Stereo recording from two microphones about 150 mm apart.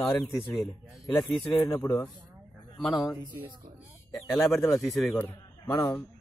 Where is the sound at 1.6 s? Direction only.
20° left (ahead or behind).